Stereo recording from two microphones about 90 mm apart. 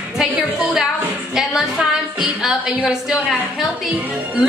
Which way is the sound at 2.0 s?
5° right (ahead or behind).